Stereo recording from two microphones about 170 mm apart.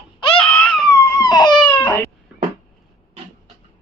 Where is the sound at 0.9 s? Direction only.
20° left (ahead or behind).